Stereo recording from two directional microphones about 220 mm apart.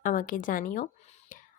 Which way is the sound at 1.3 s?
35° left (ahead or behind).